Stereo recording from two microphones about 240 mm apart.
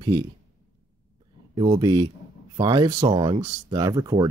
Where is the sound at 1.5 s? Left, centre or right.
Centre.